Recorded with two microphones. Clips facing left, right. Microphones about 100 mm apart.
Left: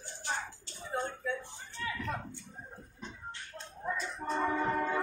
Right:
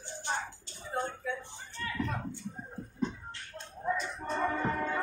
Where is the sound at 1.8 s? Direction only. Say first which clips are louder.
Left 1 dB; 5° left (ahead or behind).